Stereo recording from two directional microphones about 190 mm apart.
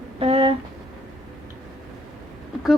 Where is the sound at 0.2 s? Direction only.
30° right (ahead or behind).